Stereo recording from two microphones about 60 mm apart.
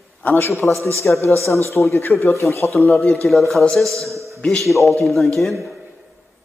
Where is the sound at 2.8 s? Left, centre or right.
Left.